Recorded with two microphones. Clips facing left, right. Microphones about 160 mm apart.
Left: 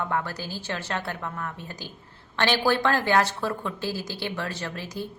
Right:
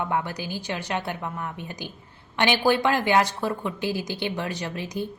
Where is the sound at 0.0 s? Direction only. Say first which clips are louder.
Right 2 dB; 15° right (ahead or behind).